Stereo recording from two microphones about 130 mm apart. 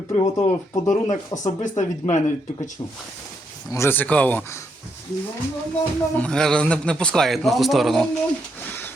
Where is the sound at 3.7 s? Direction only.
20° left (ahead or behind).